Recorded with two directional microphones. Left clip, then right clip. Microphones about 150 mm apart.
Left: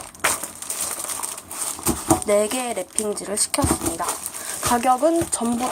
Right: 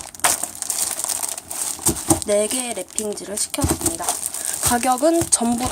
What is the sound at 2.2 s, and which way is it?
Speech, 15° right (ahead or behind).